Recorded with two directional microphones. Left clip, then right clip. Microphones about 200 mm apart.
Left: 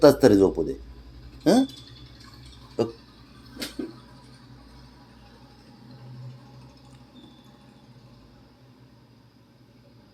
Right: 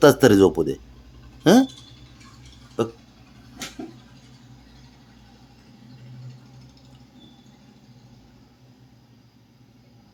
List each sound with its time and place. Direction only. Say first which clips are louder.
0.0 s a man's voice: right 2 dB; 35° right (ahead or behind)
2.8 s speech: right 1 dB; 25° right (ahead or behind)